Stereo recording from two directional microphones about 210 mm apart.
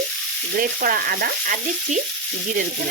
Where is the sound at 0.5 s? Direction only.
45° right (ahead or behind).